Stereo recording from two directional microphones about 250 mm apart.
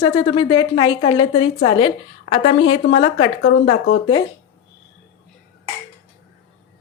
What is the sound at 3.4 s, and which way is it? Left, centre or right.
Speech, left.